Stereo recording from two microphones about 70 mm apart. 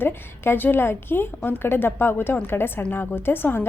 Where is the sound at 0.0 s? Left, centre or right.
Left.